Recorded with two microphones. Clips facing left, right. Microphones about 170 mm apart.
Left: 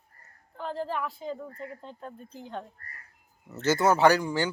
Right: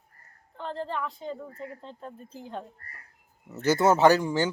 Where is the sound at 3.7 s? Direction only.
20° right (ahead or behind).